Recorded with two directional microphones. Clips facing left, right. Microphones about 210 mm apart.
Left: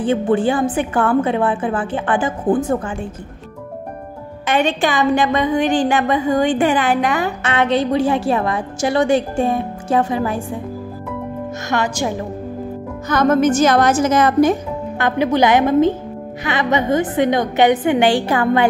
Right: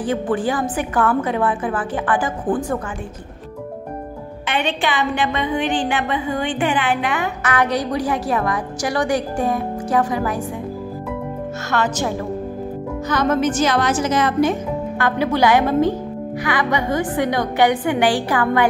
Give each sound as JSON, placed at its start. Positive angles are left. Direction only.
{"t": 0.0, "sound": "a woman's voice", "side_deg": 25}
{"t": 4.5, "sound": "a woman's voice", "side_deg": 45}
{"t": 7.4, "sound": "a woman's voice", "side_deg": 25}
{"t": 11.7, "sound": "a woman's voice", "side_deg": 15}
{"t": 13.1, "sound": "a woman's voice", "side_deg": 45}
{"t": 15.0, "sound": "a woman's voice", "side_deg": 20}